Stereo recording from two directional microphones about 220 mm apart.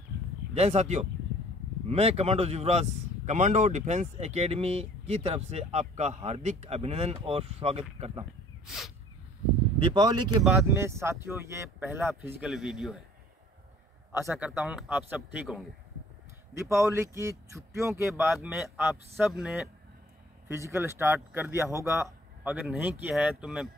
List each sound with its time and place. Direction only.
0.6 s speech: 30° right (ahead or behind)
8.6 s a sound: centre (ahead or behind)
9.8 s speech: 20° right (ahead or behind)
10.4 s speech: centre (ahead or behind)
10.7 s speech: 10° right (ahead or behind)
14.1 s speech: 10° right (ahead or behind)